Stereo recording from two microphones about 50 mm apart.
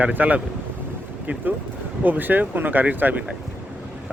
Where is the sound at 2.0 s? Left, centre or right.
Right.